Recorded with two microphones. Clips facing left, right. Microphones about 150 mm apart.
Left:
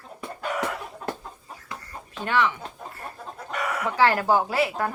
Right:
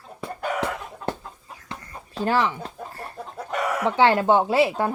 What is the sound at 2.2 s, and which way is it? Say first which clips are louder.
A woman's voice: right 2 dB; 35° right (ahead or behind).